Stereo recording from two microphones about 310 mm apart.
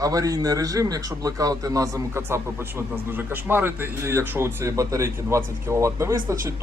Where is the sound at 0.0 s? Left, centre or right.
Centre.